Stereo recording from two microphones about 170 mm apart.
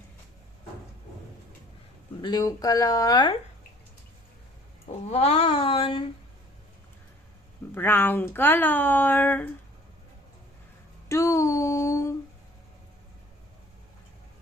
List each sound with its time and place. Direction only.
2.2 s speech: 20° left (ahead or behind)
5.0 s speech: 40° left (ahead or behind)
7.7 s speech: 10° left (ahead or behind)
11.1 s a sound: 20° left (ahead or behind)